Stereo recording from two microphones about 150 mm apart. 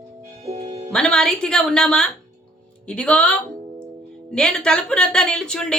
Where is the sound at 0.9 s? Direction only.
5° left (ahead or behind).